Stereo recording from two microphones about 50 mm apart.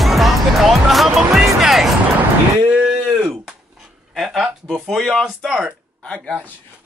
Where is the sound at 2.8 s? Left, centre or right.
Centre.